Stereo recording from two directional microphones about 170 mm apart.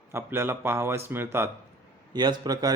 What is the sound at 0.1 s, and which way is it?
A man's voice, 15° right (ahead or behind).